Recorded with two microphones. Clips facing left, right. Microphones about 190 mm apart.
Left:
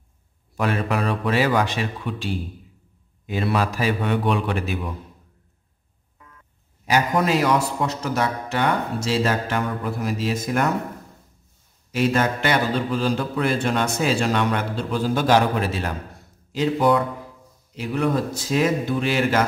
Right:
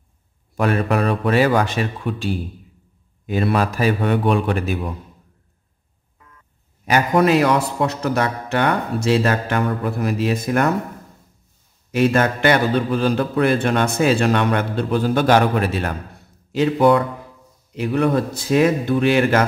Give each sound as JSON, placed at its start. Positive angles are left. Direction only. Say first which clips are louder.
{"t": 0.6, "sound": "speech", "louder": "right 4 dB", "side_deg": -55}
{"t": 6.9, "sound": "a man's voice", "louder": "right 4 dB", "side_deg": -65}
{"t": 11.9, "sound": "a man's voice", "louder": "right 4 dB", "side_deg": -55}